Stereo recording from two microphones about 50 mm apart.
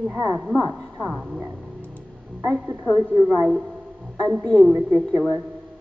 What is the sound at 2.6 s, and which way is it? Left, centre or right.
Speech, right.